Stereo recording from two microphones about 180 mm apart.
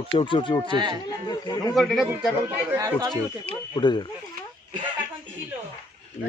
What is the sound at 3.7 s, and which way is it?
Speech, 25° left (ahead or behind).